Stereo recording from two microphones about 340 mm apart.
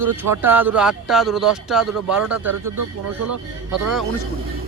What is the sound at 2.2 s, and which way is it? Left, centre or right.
Speech, right.